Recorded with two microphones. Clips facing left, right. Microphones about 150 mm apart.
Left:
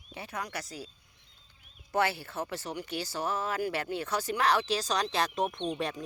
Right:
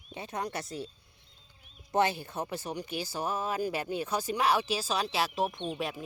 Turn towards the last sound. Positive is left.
turn(degrees=-5)  # may be behind; listen again after turning